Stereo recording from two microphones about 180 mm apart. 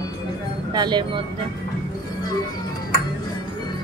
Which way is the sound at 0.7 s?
25° right (ahead or behind).